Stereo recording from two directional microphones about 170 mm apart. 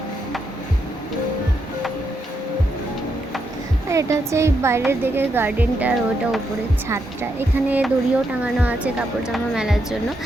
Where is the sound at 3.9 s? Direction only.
15° right (ahead or behind).